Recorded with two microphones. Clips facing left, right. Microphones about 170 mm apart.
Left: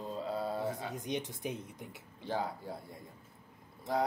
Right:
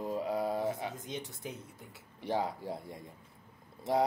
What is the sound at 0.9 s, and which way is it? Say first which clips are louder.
Speech: left 4 dB; 20° left (ahead or behind).